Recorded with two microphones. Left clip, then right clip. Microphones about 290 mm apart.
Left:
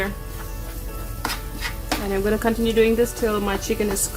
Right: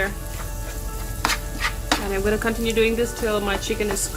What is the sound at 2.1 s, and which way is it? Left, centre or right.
Speech, left.